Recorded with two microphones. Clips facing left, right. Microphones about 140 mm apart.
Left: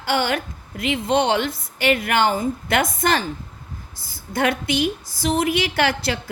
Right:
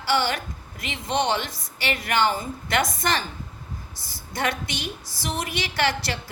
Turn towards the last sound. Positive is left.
turn(degrees=50)  # may be behind; listen again after turning